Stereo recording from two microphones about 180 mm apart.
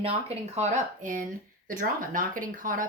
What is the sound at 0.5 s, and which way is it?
A woman's voice, 45° right (ahead or behind).